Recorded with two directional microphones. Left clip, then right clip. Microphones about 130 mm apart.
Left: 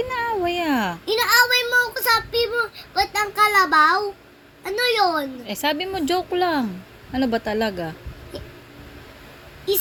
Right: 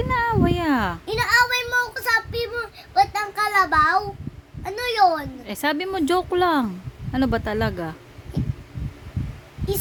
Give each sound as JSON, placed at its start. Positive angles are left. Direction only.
{"t": 0.0, "sound": "cat", "side_deg": -25}
{"t": 4.6, "sound": "a woman's voice", "side_deg": -20}
{"t": 5.5, "sound": "a woman's voice", "side_deg": -30}